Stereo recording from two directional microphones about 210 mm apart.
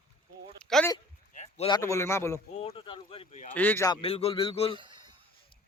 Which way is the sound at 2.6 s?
25° left (ahead or behind).